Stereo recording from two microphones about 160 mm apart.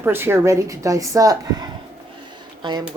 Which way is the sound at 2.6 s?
25° right (ahead or behind).